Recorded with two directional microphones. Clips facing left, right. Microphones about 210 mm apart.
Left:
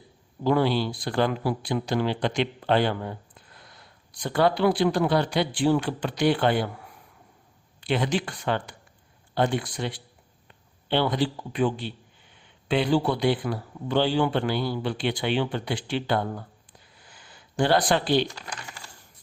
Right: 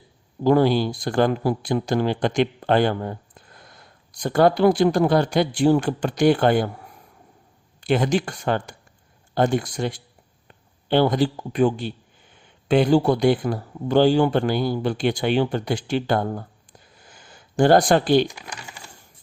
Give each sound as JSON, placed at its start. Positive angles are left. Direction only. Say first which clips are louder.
{"t": 0.4, "sound": "speech", "louder": "right 5 dB", "side_deg": -45}
{"t": 7.8, "sound": "speech", "louder": "right 5 dB", "side_deg": -45}
{"t": 17.0, "sound": "a sound", "louder": "right 3 dB", "side_deg": -45}